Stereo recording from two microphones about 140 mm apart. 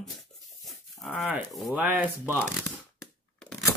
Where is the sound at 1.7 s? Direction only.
10° right (ahead or behind).